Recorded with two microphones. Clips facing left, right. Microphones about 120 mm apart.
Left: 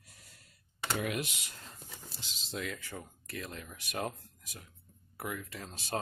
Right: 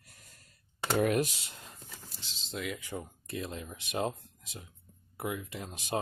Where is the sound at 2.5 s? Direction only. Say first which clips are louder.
Right 2 dB; centre (ahead or behind).